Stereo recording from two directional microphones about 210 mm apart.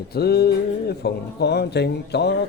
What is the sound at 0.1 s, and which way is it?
Speech, 50° left (ahead or behind).